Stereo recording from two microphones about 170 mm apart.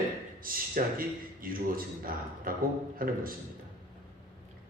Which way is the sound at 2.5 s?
55° right (ahead or behind).